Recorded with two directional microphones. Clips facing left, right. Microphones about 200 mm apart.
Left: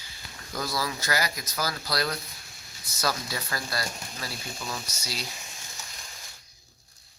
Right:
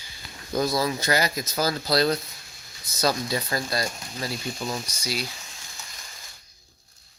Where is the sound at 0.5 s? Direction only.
20° right (ahead or behind).